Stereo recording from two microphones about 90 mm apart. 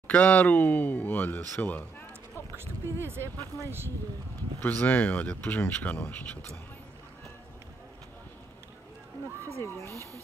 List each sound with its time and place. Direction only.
0.1 s speech: 15° left (ahead or behind)
2.5 s speech: 25° right (ahead or behind)
3.3 s speech: 30° left (ahead or behind)
4.6 s speech: 15° left (ahead or behind)
9.6 s speech: 30° left (ahead or behind)